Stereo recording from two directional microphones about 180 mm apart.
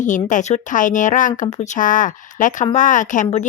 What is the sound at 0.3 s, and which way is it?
A woman's voice, 40° left (ahead or behind).